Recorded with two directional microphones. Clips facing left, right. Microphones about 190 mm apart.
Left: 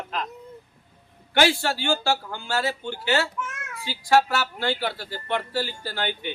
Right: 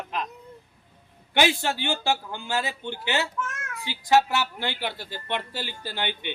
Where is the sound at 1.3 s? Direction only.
20° right (ahead or behind).